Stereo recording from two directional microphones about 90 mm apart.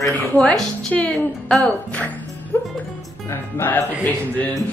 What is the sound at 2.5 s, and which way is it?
A man's voice, 25° left (ahead or behind).